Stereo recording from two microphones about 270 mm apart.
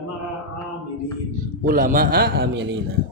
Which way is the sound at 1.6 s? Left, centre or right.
Right.